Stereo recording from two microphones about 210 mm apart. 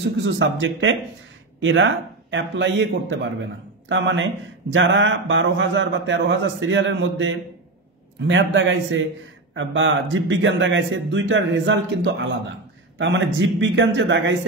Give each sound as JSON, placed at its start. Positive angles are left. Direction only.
{"t": 0.2, "sound": "speech", "side_deg": -60}